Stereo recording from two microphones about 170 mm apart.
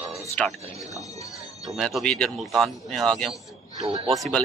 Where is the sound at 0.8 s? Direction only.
20° left (ahead or behind).